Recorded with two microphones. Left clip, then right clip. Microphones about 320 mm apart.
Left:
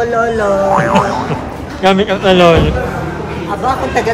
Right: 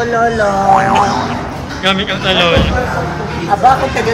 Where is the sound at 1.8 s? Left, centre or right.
Centre.